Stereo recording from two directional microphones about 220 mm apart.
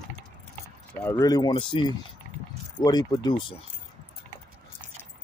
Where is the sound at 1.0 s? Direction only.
10° left (ahead or behind).